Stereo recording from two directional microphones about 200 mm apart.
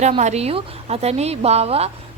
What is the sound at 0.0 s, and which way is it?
A woman's voice, 35° right (ahead or behind).